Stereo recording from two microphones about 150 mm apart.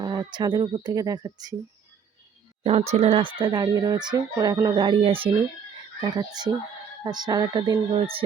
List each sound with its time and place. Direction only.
0.0 s speech: 30° right (ahead or behind)
2.6 s speech: 45° right (ahead or behind); by 7.8 s 25° right (ahead or behind)
7.9 s speech: 35° right (ahead or behind)